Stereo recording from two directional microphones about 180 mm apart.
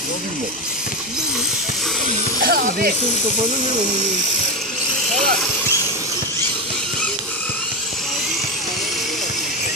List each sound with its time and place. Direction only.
2.4 s music: 55° right (ahead or behind)